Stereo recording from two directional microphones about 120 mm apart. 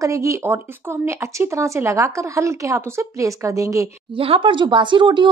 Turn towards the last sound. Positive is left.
turn(degrees=-40)  # may be behind; listen again after turning